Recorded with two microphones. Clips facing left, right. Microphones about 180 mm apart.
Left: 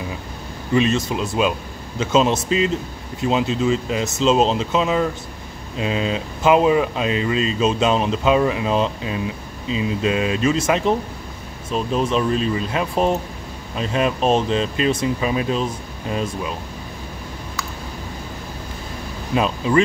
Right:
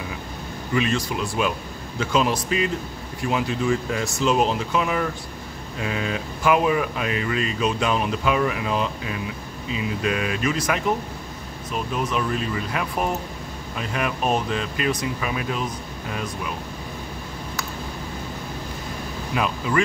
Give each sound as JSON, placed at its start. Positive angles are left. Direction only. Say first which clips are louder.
{"t": 0.7, "sound": "speech", "louder": "left 5 dB", "side_deg": 25}
{"t": 19.3, "sound": "speech", "louder": "left 6 dB", "side_deg": 25}